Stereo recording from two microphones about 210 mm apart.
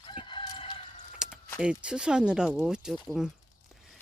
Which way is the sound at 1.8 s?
5° right (ahead or behind).